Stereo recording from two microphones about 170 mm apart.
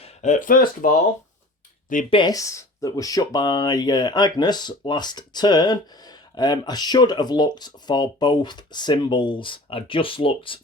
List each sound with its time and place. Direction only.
0.0 s speech: 45° left (ahead or behind)
2.0 s speech: 25° left (ahead or behind)